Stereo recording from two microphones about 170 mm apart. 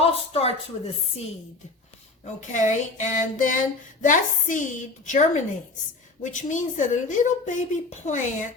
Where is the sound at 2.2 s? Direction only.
45° left (ahead or behind).